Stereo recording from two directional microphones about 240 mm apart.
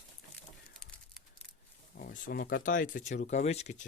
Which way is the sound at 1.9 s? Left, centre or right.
Left.